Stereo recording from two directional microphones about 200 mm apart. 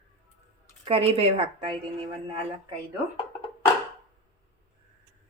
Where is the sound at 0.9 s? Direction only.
30° right (ahead or behind).